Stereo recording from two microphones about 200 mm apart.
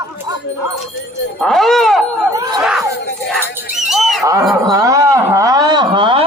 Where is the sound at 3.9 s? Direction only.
Centre (ahead or behind).